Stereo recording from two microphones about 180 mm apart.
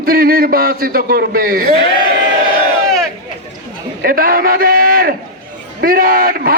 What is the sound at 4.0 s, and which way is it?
A man's voice, 55° right (ahead or behind).